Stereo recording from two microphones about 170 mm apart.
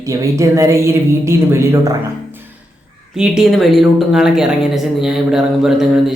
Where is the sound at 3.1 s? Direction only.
5° right (ahead or behind).